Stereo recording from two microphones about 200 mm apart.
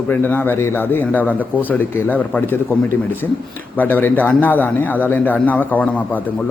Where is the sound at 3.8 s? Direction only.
10° left (ahead or behind).